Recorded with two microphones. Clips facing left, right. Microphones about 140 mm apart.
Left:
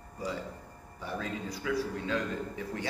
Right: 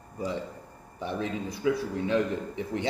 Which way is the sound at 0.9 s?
20° right (ahead or behind).